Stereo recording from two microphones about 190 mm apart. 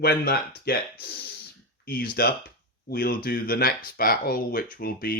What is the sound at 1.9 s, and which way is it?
Speech, 50° left (ahead or behind).